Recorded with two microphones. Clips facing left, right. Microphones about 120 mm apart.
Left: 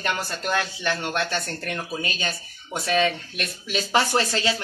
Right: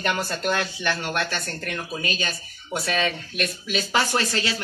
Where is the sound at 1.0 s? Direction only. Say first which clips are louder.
Left 1 dB; 25° left (ahead or behind).